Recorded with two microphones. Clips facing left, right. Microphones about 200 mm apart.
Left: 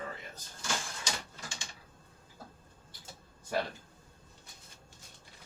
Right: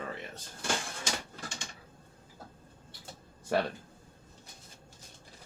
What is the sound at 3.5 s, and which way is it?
Speech, 70° right (ahead or behind).